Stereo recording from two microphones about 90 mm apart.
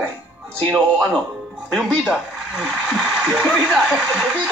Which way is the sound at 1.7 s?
5° right (ahead or behind).